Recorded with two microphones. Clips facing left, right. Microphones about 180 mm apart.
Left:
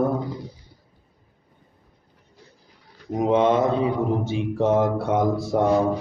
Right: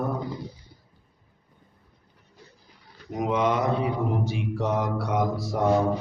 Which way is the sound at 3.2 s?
25° left (ahead or behind).